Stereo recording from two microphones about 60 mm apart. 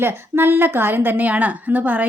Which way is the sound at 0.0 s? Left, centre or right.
Right.